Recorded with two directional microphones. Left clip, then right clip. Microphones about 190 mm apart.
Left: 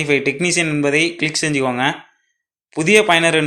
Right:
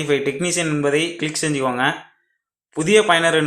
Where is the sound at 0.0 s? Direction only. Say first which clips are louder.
Left 3 dB; 30° left (ahead or behind).